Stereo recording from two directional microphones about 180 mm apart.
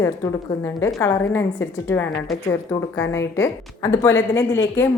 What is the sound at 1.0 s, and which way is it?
Speech, 15° left (ahead or behind).